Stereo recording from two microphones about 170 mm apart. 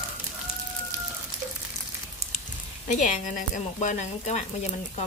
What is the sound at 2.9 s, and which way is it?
Speech, 50° left (ahead or behind).